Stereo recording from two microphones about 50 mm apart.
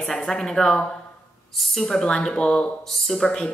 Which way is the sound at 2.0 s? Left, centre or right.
Centre.